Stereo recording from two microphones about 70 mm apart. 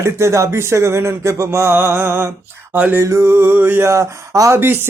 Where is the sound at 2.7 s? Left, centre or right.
Right.